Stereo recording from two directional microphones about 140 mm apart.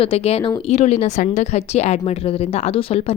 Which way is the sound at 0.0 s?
45° left (ahead or behind).